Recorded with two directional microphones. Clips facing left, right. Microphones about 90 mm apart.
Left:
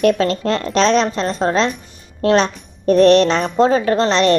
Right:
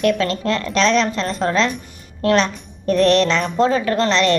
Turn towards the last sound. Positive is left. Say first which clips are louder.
# left 2 dB
turn(degrees=30)  # may be behind; listen again after turning